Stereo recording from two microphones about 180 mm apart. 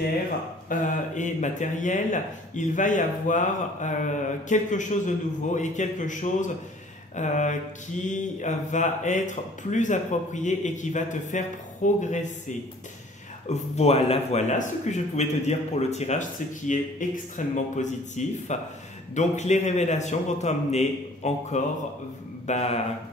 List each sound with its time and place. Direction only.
0.7 s speech: 45° left (ahead or behind)
13.5 s speech: 35° left (ahead or behind)